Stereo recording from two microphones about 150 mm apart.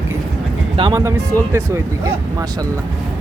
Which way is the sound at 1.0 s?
20° right (ahead or behind).